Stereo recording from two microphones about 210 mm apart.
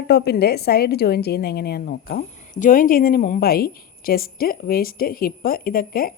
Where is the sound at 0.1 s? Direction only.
50° left (ahead or behind).